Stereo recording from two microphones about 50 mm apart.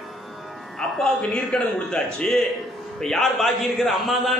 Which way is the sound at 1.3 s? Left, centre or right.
Centre.